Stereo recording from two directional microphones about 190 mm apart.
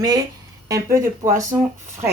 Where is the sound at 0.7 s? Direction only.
15° right (ahead or behind).